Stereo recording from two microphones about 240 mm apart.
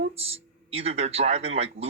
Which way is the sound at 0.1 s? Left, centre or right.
Right.